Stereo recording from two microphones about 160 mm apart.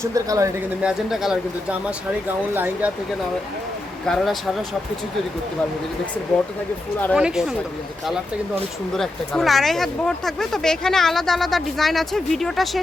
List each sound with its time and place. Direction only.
0.0 s speech: 20° right (ahead or behind)
0.8 s speech: 5° right (ahead or behind)
4.0 s speech: centre (ahead or behind)
7.1 s speech: 5° right (ahead or behind)
8.9 s speech: 5° left (ahead or behind)